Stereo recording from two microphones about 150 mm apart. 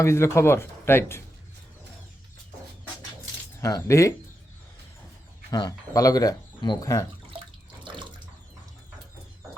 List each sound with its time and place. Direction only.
0.0 s speech: 20° left (ahead or behind)
3.6 s speech: 20° left (ahead or behind)
5.5 s speech: 25° left (ahead or behind)